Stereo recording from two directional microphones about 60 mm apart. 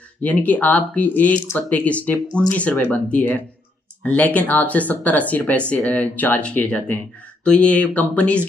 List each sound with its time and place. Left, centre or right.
0.2 s speech: left
2.7 s speech: left